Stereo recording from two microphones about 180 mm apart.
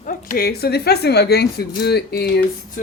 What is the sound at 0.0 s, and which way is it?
Speech, 50° left (ahead or behind).